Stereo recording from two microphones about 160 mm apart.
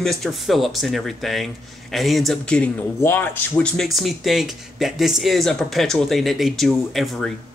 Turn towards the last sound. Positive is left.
turn(degrees=0)  # may be behind; listen again after turning